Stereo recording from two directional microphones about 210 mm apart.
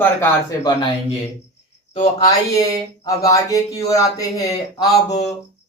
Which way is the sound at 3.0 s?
15° left (ahead or behind).